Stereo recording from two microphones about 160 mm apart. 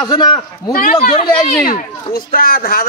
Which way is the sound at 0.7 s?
60° left (ahead or behind).